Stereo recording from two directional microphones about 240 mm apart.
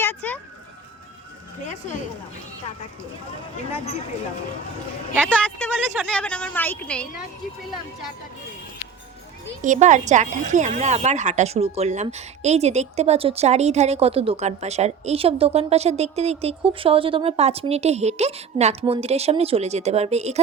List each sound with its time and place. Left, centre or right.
0.0 s a sound: centre
5.2 s a woman's voice: centre
9.6 s a woman's voice: right